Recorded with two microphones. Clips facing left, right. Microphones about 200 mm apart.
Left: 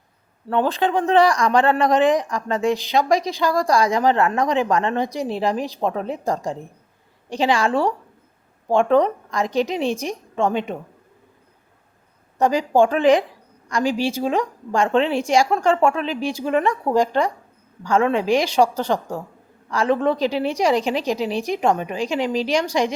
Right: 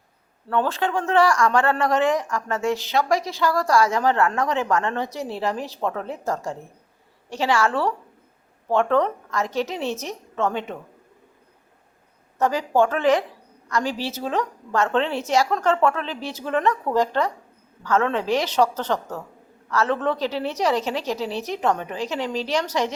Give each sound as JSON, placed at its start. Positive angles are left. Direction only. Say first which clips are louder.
{"t": 0.4, "sound": "speech", "louder": "left 3 dB", "side_deg": 15}
{"t": 12.4, "sound": "speech", "louder": "left 3 dB", "side_deg": 15}